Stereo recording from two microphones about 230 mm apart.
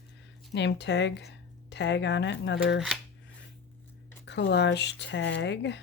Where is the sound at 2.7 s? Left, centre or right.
Centre.